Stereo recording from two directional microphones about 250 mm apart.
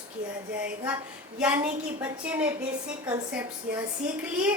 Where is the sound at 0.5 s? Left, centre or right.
Centre.